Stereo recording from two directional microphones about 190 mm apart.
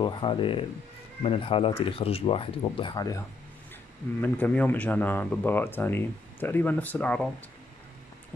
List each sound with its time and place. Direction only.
0.0 s speech: 25° left (ahead or behind); by 7.2 s 10° left (ahead or behind)